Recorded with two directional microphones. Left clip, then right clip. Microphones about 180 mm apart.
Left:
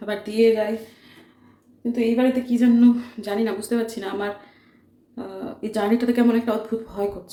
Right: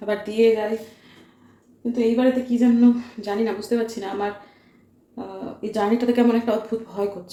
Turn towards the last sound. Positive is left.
turn(degrees=10)  # may be behind; listen again after turning